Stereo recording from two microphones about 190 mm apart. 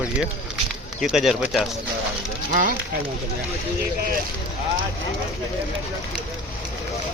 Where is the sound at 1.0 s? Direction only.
5° right (ahead or behind).